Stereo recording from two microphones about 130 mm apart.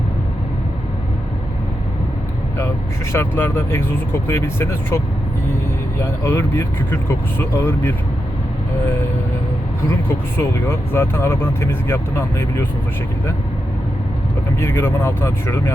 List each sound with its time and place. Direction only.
3.1 s speech: 20° left (ahead or behind)
6.0 s speech: 20° left (ahead or behind)
10.3 s speech: 20° left (ahead or behind)
14.6 s speech: 20° left (ahead or behind)